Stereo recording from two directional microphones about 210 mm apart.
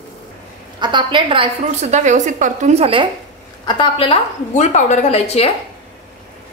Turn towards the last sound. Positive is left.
turn(degrees=30)  # may be behind; listen again after turning